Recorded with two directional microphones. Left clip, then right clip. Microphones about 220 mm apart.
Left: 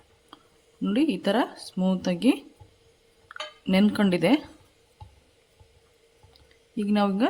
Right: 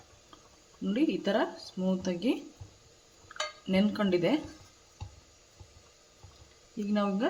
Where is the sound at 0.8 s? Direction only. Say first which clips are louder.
Left 5 dB; 55° left (ahead or behind).